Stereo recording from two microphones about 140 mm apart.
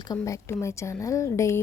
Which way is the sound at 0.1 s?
20° left (ahead or behind).